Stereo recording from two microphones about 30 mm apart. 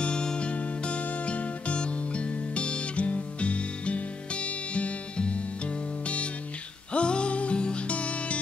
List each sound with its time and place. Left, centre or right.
0.0 s music: left
0.5 s music: left
6.9 s music: left